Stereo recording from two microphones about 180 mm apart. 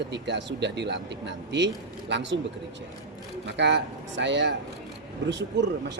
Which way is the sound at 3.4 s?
75° right (ahead or behind).